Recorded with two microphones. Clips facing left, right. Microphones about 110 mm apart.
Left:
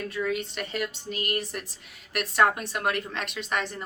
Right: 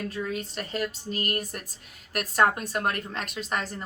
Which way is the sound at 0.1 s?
35° right (ahead or behind).